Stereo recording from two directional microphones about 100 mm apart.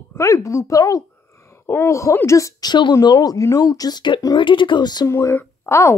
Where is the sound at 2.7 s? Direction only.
45° left (ahead or behind).